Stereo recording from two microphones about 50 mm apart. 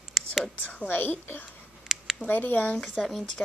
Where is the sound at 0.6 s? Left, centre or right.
Left.